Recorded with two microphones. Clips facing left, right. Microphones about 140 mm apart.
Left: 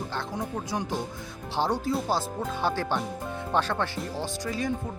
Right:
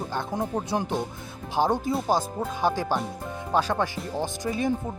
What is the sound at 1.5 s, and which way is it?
Speech, 15° right (ahead or behind).